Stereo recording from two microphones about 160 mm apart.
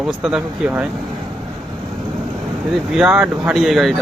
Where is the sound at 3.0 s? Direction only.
5° right (ahead or behind).